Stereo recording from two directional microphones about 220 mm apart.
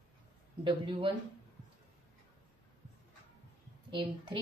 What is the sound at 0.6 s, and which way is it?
Speech, 20° right (ahead or behind).